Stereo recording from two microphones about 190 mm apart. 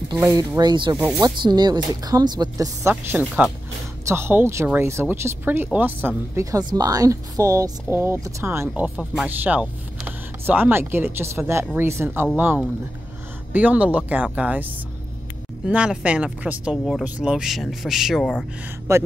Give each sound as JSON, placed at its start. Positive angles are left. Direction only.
{"t": 0.1, "sound": "speech", "side_deg": -20}
{"t": 18.9, "sound": "speech", "side_deg": -15}